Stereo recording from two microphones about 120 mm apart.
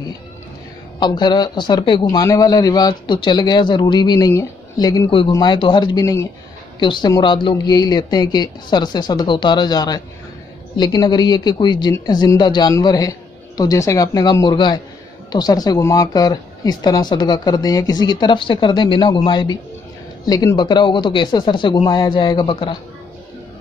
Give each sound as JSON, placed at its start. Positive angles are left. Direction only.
{"t": 0.9, "sound": "speech", "side_deg": 35}
{"t": 2.0, "sound": "a woman's voice", "side_deg": 30}